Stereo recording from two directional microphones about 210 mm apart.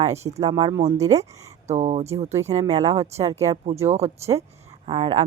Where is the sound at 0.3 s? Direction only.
20° right (ahead or behind).